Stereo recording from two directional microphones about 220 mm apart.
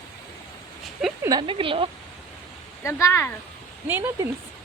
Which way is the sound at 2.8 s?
15° left (ahead or behind).